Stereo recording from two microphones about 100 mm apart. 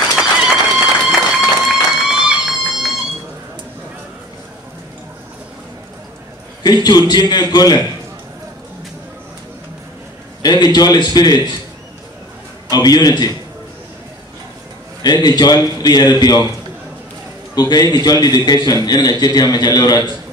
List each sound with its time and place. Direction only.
0.1 s a sound: 5° right (ahead or behind)
1.7 s music: 5° right (ahead or behind)
6.6 s a man's voice: 45° left (ahead or behind)
10.4 s a man's voice: 45° left (ahead or behind)
12.6 s a man's voice: 40° left (ahead or behind)
15.0 s a man's voice: 45° left (ahead or behind)
17.6 s a man's voice: 45° left (ahead or behind)